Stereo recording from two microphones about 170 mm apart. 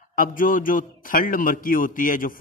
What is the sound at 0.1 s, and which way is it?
A man's voice, 55° left (ahead or behind).